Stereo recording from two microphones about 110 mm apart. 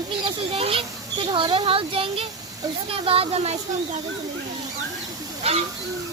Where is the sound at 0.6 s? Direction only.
60° right (ahead or behind).